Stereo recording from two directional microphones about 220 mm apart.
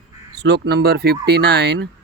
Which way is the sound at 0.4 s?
45° right (ahead or behind).